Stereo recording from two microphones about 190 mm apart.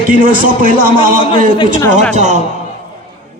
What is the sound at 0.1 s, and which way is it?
A man's voice, 45° right (ahead or behind).